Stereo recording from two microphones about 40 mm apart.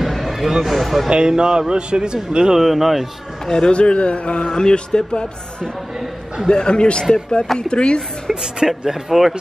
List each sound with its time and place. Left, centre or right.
0.0 s a sound: centre
0.7 s speech: centre
1.1 s speech: centre
2.6 s speech: centre
3.4 s speech: centre
4.5 s speech: centre
8.4 s speech: centre